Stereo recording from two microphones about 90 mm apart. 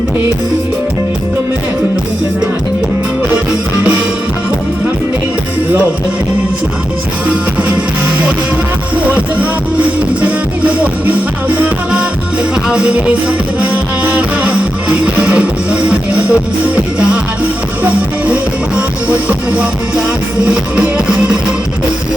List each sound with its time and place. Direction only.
9.0 s music: 15° right (ahead or behind)
19.1 s music: 10° right (ahead or behind)